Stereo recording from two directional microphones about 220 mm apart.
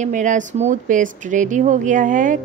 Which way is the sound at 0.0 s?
35° right (ahead or behind).